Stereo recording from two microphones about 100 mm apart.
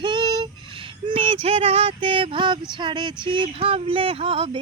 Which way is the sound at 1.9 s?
60° right (ahead or behind).